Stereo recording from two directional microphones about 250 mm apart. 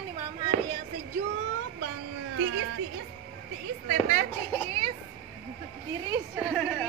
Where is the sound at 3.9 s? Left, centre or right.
Right.